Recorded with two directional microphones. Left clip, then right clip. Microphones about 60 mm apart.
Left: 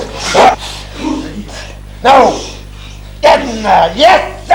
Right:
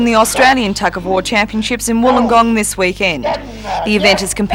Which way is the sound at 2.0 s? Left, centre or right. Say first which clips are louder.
Left 4 dB; left.